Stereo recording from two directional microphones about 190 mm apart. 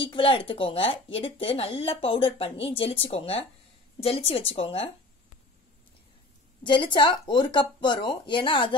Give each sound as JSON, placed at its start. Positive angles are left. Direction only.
{"t": 0.0, "sound": "a woman's voice", "side_deg": 25}
{"t": 6.6, "sound": "speech", "side_deg": 25}